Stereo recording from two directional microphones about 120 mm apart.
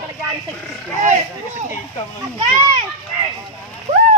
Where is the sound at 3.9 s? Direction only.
75° right (ahead or behind).